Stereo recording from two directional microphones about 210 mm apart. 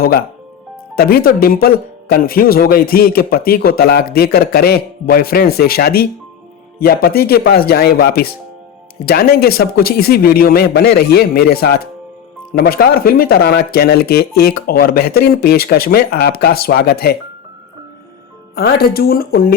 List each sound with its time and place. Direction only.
0.0 s speech: 45° left (ahead or behind)
18.5 s speech: 45° left (ahead or behind)